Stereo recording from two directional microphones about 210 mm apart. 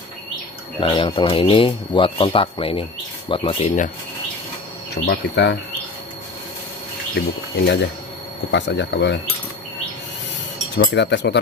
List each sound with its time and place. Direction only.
0.7 s speech: 25° left (ahead or behind)
4.9 s speech: 50° left (ahead or behind)
7.6 s speech: 55° left (ahead or behind)
10.7 s speech: 55° left (ahead or behind)